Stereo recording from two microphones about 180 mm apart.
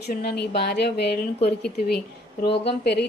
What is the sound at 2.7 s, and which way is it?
Speech, 65° left (ahead or behind).